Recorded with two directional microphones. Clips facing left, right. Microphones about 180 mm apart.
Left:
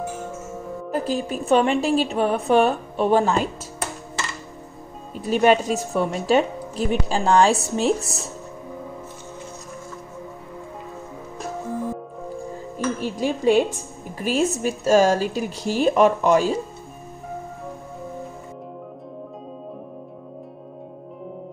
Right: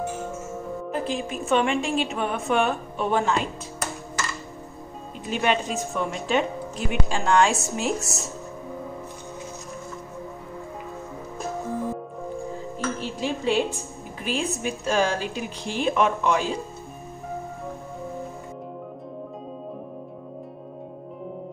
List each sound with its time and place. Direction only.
0.9 s a woman's voice: 40° left (ahead or behind)
5.2 s a woman's voice: 40° left (ahead or behind)
12.7 s a woman's voice: 45° left (ahead or behind)